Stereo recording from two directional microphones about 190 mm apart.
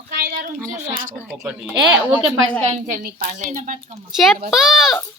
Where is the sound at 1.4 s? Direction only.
10° right (ahead or behind).